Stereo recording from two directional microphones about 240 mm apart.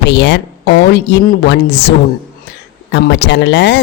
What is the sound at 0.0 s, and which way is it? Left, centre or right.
Speech, left.